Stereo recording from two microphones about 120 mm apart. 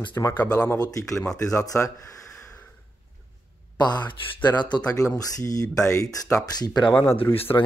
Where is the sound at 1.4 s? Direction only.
25° left (ahead or behind).